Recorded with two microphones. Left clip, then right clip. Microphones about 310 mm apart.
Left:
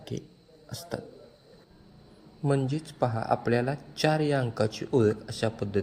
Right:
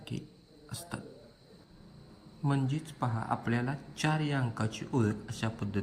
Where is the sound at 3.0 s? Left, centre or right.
Left.